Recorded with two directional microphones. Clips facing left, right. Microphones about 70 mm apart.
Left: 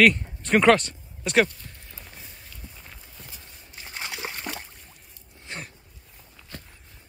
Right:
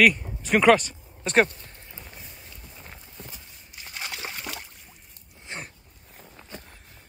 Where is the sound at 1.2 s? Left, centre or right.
Right.